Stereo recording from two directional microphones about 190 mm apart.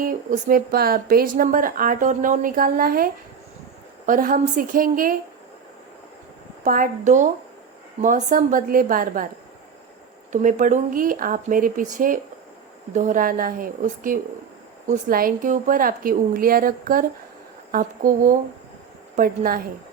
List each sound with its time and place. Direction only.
0.0 s a woman's voice: 45° right (ahead or behind)
6.7 s a woman's voice: 45° right (ahead or behind)
10.3 s a woman's voice: 40° right (ahead or behind)